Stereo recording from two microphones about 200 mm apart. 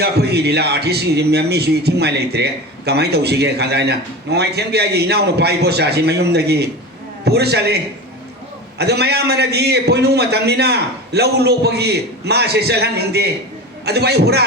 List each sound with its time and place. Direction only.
0.0 s a man's voice: 55° right (ahead or behind)
8.8 s a man's voice: 55° right (ahead or behind)